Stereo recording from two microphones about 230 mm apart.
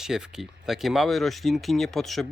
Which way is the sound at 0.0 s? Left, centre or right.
Centre.